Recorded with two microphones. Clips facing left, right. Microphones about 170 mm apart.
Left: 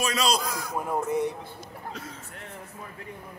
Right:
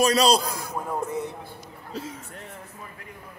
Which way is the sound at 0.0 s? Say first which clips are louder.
Right 6 dB; 35° right (ahead or behind).